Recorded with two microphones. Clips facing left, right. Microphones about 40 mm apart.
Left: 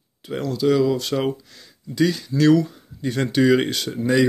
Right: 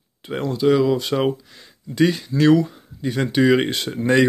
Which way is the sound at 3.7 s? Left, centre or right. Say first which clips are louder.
Right 2 dB; right.